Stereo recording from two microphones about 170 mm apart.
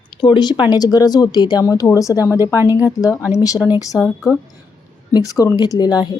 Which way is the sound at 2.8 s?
20° left (ahead or behind).